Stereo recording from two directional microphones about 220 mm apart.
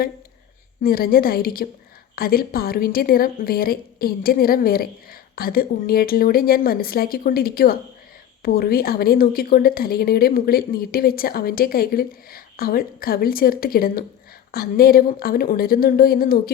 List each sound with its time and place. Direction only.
0.8 s speech: 40° left (ahead or behind)